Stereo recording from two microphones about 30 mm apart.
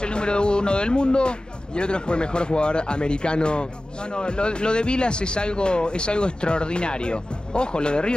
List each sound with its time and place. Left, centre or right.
0.0 s speech: left